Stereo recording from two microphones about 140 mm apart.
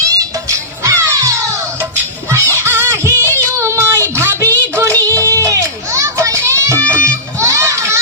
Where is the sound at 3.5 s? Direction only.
20° right (ahead or behind).